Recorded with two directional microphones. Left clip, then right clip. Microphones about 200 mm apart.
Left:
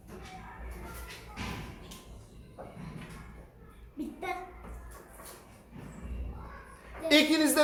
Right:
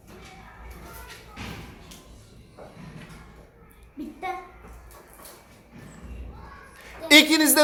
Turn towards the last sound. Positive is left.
turn(degrees=-35)  # may be behind; listen again after turning